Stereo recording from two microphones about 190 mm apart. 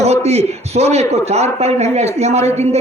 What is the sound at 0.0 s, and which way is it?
A man's voice, 35° right (ahead or behind).